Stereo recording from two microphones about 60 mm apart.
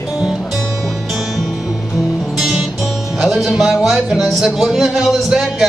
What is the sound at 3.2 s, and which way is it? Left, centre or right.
Speech, centre.